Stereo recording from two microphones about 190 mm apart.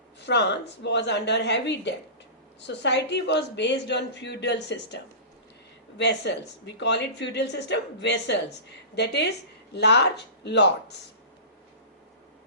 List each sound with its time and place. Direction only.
0.2 s speech: 65° left (ahead or behind)
9.7 s speech: 65° left (ahead or behind)